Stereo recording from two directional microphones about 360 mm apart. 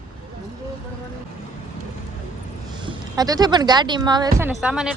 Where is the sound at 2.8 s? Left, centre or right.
Centre.